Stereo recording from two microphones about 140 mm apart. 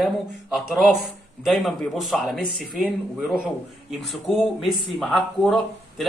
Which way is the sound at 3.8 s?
Centre (ahead or behind).